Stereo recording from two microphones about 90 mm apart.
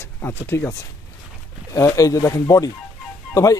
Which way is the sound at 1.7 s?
40° left (ahead or behind).